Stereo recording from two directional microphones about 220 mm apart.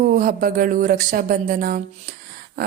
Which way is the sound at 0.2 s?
40° right (ahead or behind).